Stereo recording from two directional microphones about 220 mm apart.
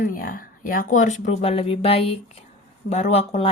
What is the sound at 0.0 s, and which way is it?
A woman's voice, 40° left (ahead or behind).